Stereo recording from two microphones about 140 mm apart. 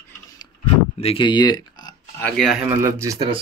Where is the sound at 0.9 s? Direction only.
40° left (ahead or behind).